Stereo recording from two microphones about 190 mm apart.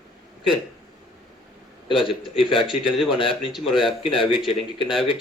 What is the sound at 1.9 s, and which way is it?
Speech, 30° left (ahead or behind).